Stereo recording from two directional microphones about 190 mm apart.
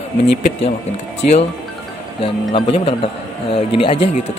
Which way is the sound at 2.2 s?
30° left (ahead or behind).